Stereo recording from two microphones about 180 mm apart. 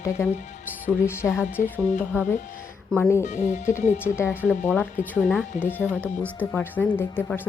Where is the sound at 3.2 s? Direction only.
40° left (ahead or behind).